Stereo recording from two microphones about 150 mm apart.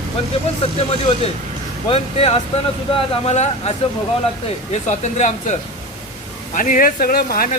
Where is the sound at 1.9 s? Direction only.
40° left (ahead or behind).